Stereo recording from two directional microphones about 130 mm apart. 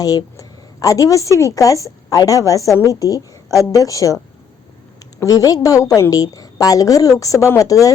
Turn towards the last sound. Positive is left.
turn(degrees=25)  # may be behind; listen again after turning